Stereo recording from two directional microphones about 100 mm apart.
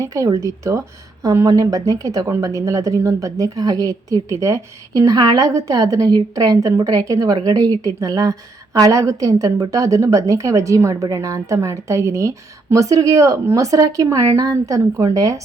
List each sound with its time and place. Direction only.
0.0 s speech: 35° right (ahead or behind)